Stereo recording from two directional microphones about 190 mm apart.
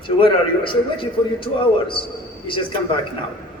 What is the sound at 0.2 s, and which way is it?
A man's voice, 25° left (ahead or behind).